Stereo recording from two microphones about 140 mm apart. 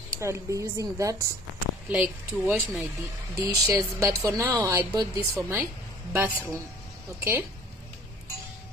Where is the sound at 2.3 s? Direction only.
5° right (ahead or behind).